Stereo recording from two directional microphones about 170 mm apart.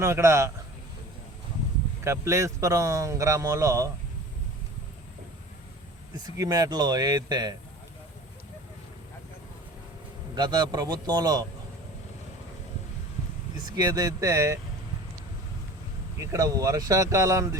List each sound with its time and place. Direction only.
0.0 s speech: 15° right (ahead or behind)
2.0 s speech: 15° right (ahead or behind)
6.1 s speech: 20° right (ahead or behind)
10.3 s speech: 25° right (ahead or behind)
13.7 s speech: 20° right (ahead or behind)
16.1 s speech: 20° right (ahead or behind)